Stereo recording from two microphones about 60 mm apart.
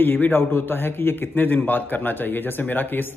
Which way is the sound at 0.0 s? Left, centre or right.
Left.